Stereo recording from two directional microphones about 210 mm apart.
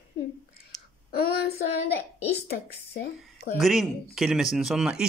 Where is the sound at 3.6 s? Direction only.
Centre (ahead or behind).